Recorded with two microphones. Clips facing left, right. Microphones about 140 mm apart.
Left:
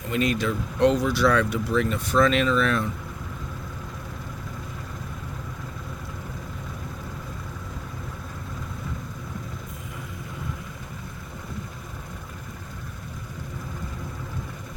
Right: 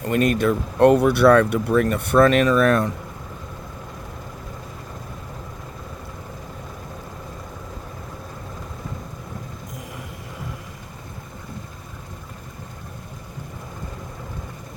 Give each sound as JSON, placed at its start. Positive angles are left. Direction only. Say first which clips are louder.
{"t": 0.0, "sound": "speech", "louder": "right 5 dB", "side_deg": -55}